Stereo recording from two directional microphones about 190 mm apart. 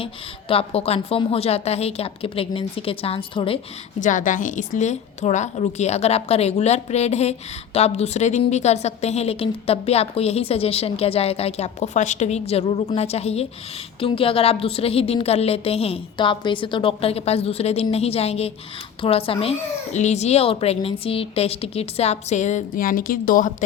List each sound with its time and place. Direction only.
0.0 s a woman's voice: 30° left (ahead or behind)
4.0 s a woman's voice: 45° left (ahead or behind)